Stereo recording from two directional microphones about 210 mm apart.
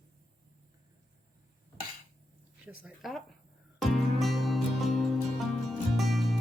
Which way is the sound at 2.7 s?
5° right (ahead or behind).